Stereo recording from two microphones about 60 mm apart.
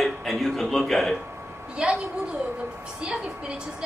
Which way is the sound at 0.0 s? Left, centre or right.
Centre.